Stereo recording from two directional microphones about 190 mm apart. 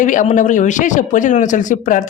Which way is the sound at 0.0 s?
40° left (ahead or behind).